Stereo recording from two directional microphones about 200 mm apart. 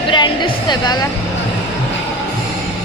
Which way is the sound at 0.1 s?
20° left (ahead or behind).